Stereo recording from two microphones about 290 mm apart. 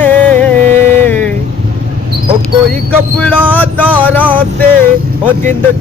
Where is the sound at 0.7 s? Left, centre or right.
Right.